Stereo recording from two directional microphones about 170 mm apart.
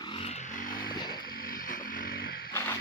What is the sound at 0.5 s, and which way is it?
Vehicle, 55° left (ahead or behind).